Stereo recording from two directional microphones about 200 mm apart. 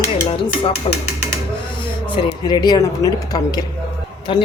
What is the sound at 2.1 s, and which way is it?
A woman's voice, 25° left (ahead or behind).